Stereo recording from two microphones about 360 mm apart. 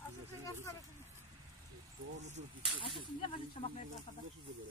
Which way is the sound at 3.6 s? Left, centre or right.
Centre.